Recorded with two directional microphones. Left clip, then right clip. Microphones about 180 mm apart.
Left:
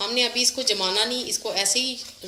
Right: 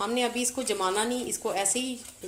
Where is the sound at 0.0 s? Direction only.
50° right (ahead or behind).